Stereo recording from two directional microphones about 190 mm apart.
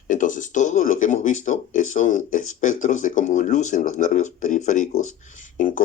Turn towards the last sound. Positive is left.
turn(degrees=45)  # may be behind; listen again after turning